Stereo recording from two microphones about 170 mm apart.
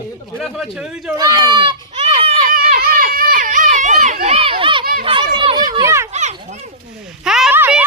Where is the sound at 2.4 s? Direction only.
55° right (ahead or behind); by 5.7 s 30° right (ahead or behind).